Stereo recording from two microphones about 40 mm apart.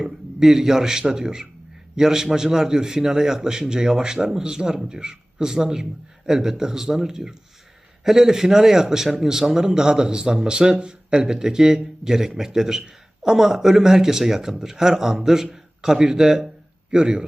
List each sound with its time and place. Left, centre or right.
0.0 s a man's voice: centre